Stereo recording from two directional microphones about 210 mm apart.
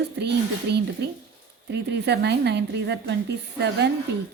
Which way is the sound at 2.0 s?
55° right (ahead or behind).